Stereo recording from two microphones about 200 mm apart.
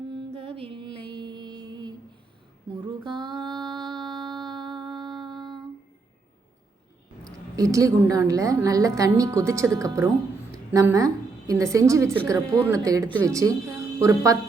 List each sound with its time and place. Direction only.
0.3 s music: 30° right (ahead or behind)
2.8 s a sound: 20° right (ahead or behind)
7.5 s a woman's voice: 15° right (ahead or behind)